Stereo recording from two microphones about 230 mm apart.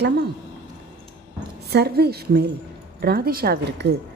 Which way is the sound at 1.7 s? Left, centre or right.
Right.